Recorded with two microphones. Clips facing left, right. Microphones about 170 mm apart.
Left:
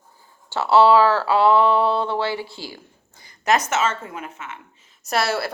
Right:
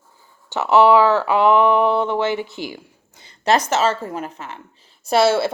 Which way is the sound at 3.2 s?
30° right (ahead or behind).